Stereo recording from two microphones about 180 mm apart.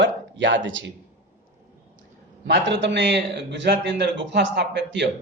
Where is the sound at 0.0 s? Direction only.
90° right.